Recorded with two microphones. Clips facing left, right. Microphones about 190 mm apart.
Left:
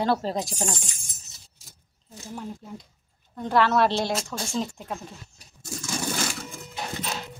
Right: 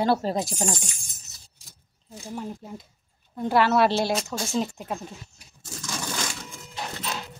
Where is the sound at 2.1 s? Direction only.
15° right (ahead or behind).